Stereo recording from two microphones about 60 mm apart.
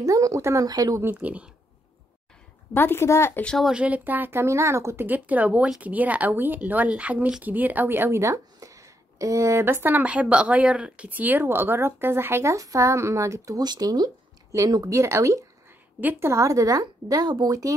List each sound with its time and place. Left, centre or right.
0.0 s a woman's voice: right
1.1 s speech: right
2.7 s a woman's voice: left
3.1 s speech: left
3.7 s speech: right
4.5 s speech: right
5.0 s speech: right
8.2 s speech: right
10.0 s speech: right
12.5 s speech: right
14.5 s a woman's voice: right